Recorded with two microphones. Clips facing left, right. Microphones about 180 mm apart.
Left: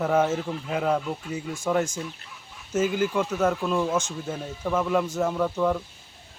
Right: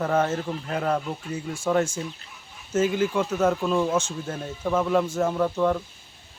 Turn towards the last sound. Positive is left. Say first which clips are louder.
# right 1 dB
turn(degrees=0)  # may be behind; listen again after turning